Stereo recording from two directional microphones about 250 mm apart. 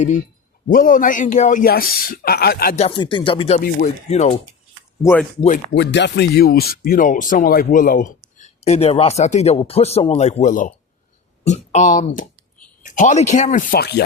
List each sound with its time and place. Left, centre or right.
0.7 s speech: left
2.7 s speech: left
5.7 s speech: left